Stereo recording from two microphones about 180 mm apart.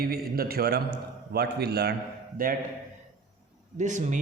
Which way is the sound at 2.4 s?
50° right (ahead or behind).